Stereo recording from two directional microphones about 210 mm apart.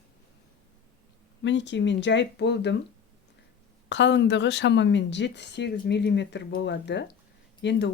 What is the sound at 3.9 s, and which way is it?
Speech, 60° left (ahead or behind).